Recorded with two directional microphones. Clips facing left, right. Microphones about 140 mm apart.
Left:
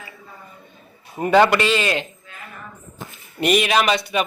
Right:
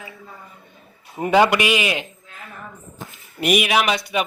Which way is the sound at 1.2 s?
15° right (ahead or behind).